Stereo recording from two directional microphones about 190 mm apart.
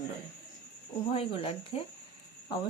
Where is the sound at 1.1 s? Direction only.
30° left (ahead or behind).